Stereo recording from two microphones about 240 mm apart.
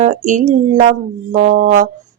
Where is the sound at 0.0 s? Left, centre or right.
Right.